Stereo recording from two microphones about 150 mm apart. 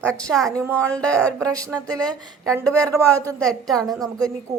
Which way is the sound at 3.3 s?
5° left (ahead or behind).